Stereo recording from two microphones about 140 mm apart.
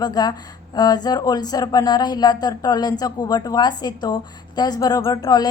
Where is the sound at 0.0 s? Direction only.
30° left (ahead or behind).